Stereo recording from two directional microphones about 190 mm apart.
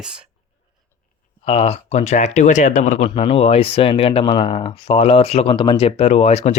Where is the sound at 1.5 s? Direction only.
30° left (ahead or behind).